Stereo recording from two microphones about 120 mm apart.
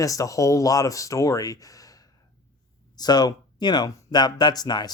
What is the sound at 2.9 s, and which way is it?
Speech, 35° left (ahead or behind).